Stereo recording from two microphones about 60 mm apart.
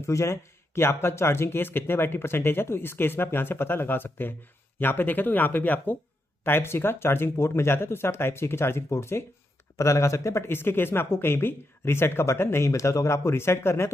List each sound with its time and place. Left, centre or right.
0.0 s speech: left
6.4 s speech: left
9.8 s speech: left
10.5 s speech: left
12.7 s speech: left